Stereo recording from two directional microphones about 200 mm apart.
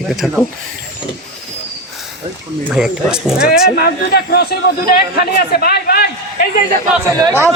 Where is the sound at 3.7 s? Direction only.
50° left (ahead or behind).